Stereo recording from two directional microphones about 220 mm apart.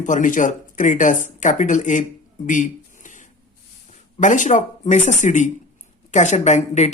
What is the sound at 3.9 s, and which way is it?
Speech, 35° left (ahead or behind).